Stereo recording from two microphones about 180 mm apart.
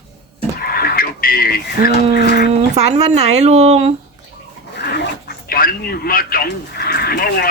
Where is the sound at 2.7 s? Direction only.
35° right (ahead or behind).